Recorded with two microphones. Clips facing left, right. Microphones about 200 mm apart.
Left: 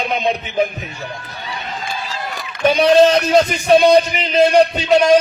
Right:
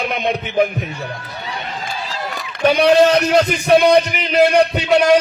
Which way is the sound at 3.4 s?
60° right (ahead or behind).